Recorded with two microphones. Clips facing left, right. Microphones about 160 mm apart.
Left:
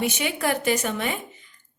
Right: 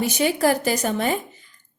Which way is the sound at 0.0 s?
35° right (ahead or behind).